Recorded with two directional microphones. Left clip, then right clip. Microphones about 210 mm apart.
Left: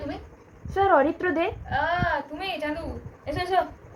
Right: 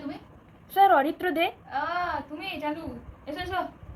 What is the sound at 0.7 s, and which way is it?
A woman's voice, 15° left (ahead or behind).